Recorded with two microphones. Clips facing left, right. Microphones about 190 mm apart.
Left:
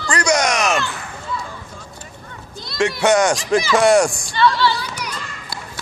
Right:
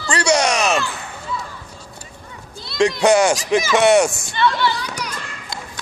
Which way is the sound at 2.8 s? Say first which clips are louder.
Right 3 dB; 30° right (ahead or behind).